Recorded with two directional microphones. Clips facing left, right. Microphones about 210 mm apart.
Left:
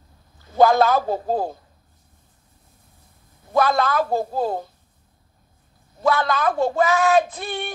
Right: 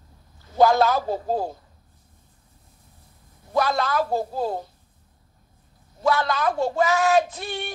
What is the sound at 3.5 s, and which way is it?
Speech, 55° left (ahead or behind).